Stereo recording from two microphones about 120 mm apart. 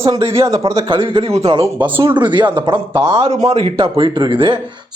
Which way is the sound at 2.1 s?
40° right (ahead or behind).